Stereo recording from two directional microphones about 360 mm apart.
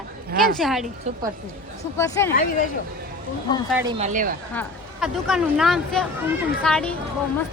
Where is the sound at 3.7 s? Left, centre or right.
Centre.